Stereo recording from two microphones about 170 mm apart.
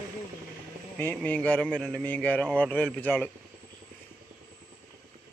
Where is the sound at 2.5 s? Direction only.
Centre (ahead or behind).